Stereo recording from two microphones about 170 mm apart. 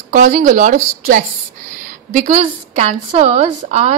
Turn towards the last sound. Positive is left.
turn(degrees=-40)  # may be behind; listen again after turning